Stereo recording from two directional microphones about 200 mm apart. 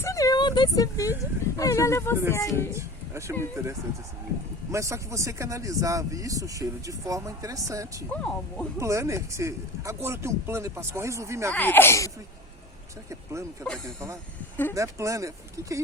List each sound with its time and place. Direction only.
0.0 s a sound: 15° left (ahead or behind)
1.2 s speech: 15° left (ahead or behind)
2.6 s speech: 15° right (ahead or behind)
8.1 s speech: 5° left (ahead or behind)
8.8 s speech: 15° right (ahead or behind)
11.5 s speech: 10° left (ahead or behind)
13.1 s speech: 15° right (ahead or behind)